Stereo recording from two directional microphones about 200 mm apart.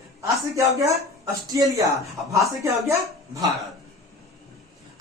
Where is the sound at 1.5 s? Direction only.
20° right (ahead or behind).